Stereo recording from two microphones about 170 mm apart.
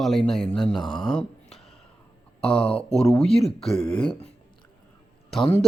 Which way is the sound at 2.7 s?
5° left (ahead or behind).